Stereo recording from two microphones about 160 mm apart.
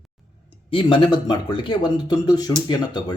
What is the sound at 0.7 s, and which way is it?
Speech, 30° left (ahead or behind).